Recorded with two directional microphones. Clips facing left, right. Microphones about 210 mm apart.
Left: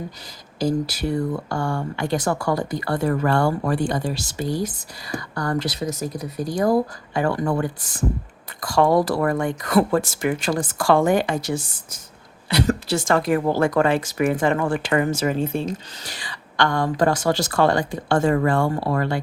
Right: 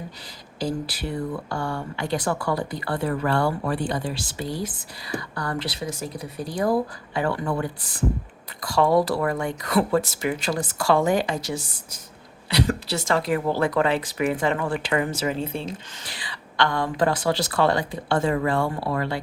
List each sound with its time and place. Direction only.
0.6 s speech: 45° left (ahead or behind)